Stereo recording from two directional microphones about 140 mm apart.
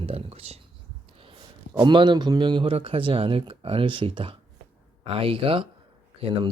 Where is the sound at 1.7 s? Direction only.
35° right (ahead or behind).